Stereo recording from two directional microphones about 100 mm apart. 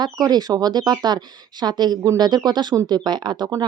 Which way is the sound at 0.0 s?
45° right (ahead or behind).